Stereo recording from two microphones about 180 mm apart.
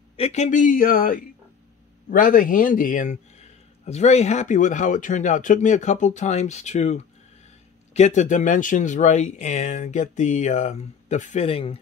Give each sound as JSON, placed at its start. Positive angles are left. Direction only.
{"t": 0.1, "sound": "speech", "side_deg": 35}